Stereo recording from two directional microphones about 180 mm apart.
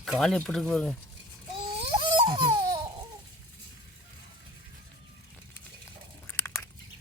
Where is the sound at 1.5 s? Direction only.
30° right (ahead or behind).